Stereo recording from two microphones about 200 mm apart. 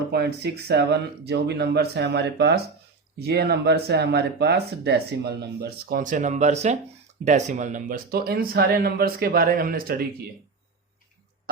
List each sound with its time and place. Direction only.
0.1 s speech: 55° right (ahead or behind)